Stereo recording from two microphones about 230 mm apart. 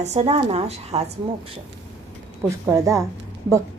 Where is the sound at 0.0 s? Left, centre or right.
Right.